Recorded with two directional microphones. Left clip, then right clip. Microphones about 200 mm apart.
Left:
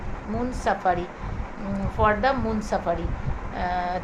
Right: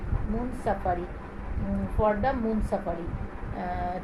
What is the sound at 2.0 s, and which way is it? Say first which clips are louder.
A woman's voice: left 4 dB; 20° left (ahead or behind).